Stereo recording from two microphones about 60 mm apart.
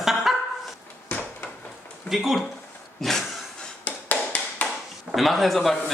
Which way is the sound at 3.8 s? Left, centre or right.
Left.